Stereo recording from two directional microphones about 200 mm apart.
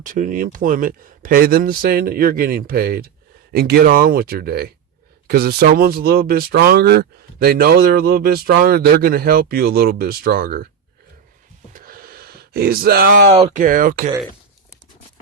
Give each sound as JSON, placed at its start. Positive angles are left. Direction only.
{"t": 0.0, "sound": "speech", "side_deg": -40}
{"t": 11.7, "sound": "a sound", "side_deg": -45}
{"t": 13.3, "sound": "speech", "side_deg": -35}